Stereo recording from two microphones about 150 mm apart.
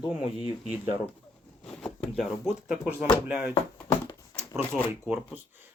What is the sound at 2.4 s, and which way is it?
Speech, 5° right (ahead or behind).